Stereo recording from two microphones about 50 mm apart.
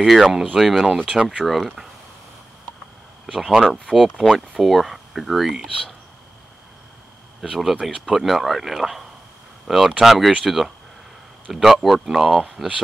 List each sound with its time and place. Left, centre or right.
0.0 s speech: centre
0.9 s speech: centre
1.4 s speech: centre
3.3 s speech: centre
7.4 s speech: centre